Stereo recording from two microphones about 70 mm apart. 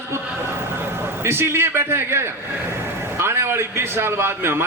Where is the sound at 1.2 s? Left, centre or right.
Right.